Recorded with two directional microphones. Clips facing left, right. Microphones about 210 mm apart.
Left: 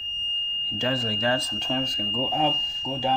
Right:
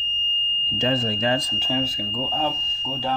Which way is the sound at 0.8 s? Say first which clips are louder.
Right 4 dB; 20° right (ahead or behind).